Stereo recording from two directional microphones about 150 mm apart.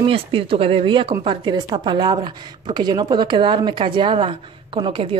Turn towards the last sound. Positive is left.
turn(degrees=-35)  # may be behind; listen again after turning